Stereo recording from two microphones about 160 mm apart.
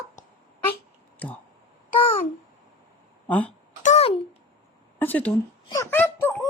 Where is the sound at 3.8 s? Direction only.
40° left (ahead or behind).